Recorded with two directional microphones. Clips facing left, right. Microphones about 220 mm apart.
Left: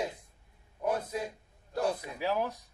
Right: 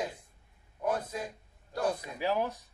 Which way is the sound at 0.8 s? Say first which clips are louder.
Left 1 dB; 10° left (ahead or behind).